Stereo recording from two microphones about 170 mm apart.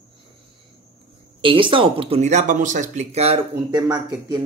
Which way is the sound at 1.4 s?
30° right (ahead or behind).